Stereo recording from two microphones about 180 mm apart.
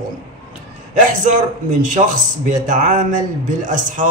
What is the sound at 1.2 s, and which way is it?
Speech, 45° right (ahead or behind).